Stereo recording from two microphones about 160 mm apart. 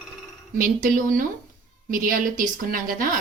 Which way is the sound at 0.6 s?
60° right (ahead or behind).